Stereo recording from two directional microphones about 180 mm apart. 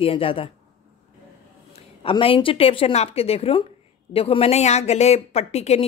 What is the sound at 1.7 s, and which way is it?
A woman's voice, 30° left (ahead or behind).